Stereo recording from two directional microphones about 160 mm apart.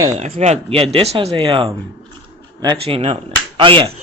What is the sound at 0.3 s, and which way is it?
Speech, 40° right (ahead or behind).